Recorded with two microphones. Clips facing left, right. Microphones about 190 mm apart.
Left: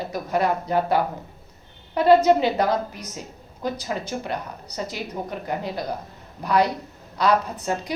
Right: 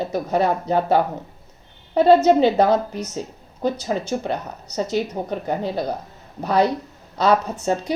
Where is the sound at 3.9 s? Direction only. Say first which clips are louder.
Right 5 dB; 30° right (ahead or behind).